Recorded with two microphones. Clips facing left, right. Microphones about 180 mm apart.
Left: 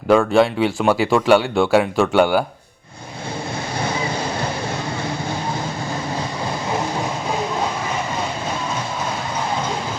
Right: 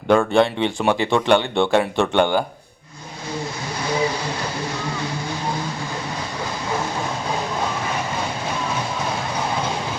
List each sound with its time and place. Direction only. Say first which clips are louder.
0.1 s speech: left 2 dB; centre (ahead or behind)